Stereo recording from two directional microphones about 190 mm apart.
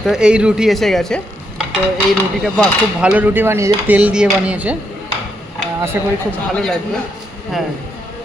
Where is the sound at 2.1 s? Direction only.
Centre (ahead or behind).